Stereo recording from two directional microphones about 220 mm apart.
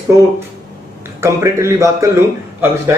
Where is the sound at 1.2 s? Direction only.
10° right (ahead or behind).